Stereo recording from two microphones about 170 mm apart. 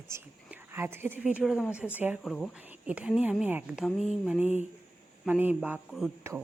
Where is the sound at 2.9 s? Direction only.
5° right (ahead or behind).